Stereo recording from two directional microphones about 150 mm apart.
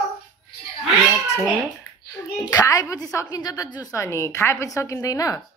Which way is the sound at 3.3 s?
25° left (ahead or behind).